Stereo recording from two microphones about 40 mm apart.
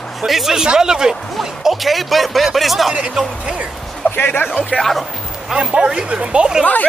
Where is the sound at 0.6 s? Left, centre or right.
Centre.